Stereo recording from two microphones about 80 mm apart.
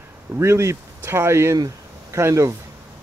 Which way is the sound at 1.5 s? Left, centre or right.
Right.